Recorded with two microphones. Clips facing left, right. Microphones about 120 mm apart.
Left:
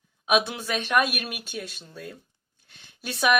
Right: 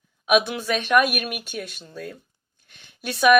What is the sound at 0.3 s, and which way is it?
Speech, 25° left (ahead or behind).